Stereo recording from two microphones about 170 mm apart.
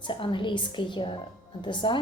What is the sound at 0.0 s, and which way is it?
A woman's voice, 30° left (ahead or behind).